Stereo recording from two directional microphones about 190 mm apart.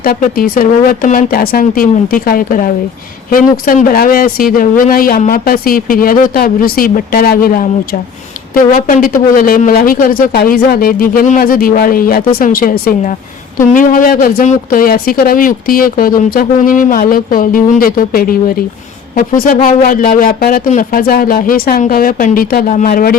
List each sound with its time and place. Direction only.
0.0 s a woman's voice: 50° left (ahead or behind)